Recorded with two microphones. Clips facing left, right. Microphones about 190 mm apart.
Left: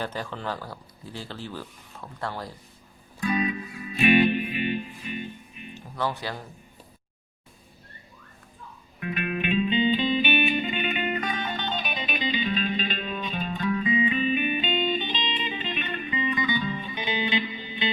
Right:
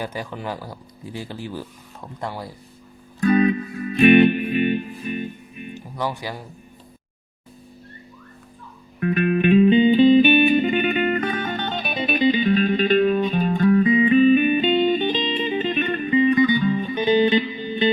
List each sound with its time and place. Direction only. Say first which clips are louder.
0.0 s speech: right 3 dB; 10° right (ahead or behind)
3.2 s music: right 9 dB; 50° right (ahead or behind)
6.0 s speech: right 2 dB; 10° right (ahead or behind)
9.0 s music: right 10 dB; 45° right (ahead or behind)
10.9 s music: right 8 dB; 15° left (ahead or behind)
11.2 s music: right 6 dB; 50° right (ahead or behind)